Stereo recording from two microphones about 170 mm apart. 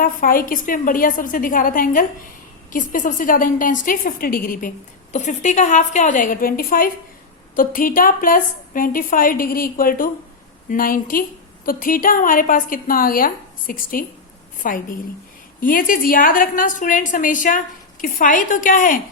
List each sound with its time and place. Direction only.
0.0 s a woman's voice: 55° left (ahead or behind)
5.1 s a woman's voice: 45° left (ahead or behind)